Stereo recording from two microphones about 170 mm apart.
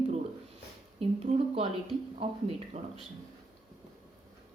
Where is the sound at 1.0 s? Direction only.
35° right (ahead or behind).